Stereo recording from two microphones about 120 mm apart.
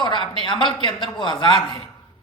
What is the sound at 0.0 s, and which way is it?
A man's voice, 45° left (ahead or behind).